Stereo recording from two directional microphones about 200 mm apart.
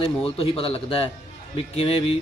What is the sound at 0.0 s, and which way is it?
Speech, 25° left (ahead or behind).